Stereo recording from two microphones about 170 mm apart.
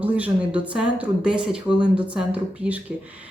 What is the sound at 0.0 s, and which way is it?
Speech, 10° right (ahead or behind).